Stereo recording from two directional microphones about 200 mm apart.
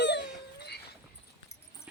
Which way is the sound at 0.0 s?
60° left (ahead or behind).